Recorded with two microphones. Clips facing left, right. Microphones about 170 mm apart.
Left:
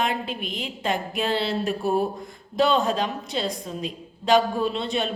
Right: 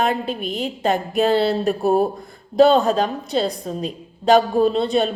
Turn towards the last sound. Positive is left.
turn(degrees=-35)  # may be behind; listen again after turning